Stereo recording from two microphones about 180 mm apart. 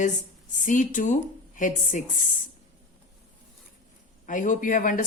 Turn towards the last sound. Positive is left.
turn(degrees=50)  # may be behind; listen again after turning